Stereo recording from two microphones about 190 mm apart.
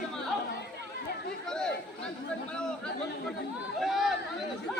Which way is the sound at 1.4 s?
5° left (ahead or behind).